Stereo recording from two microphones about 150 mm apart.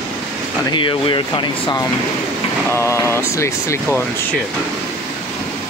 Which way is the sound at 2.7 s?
20° left (ahead or behind).